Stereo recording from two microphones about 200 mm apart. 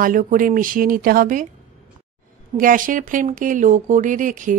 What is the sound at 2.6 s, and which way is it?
Speech, 45° right (ahead or behind).